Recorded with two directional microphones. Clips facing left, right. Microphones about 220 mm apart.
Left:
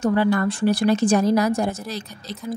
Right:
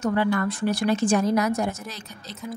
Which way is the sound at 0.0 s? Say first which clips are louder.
Left 4 dB; 35° left (ahead or behind).